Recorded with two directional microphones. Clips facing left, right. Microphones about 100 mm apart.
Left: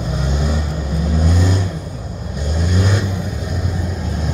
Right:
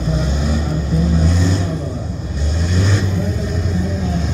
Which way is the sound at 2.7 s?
10° left (ahead or behind).